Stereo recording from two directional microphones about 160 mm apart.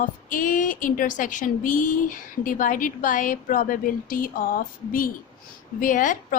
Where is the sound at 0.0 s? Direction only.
55° left (ahead or behind).